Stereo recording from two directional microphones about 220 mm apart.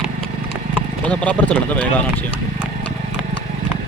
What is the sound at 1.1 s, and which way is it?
Speech, 5° left (ahead or behind).